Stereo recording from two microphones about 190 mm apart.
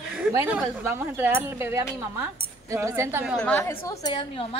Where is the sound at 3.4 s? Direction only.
10° left (ahead or behind); by 4.6 s 30° left (ahead or behind).